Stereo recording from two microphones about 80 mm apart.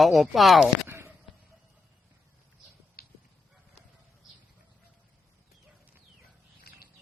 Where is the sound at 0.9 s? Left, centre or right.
Right.